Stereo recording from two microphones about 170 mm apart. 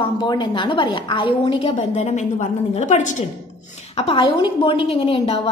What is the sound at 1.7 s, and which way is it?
A woman's voice, 45° left (ahead or behind).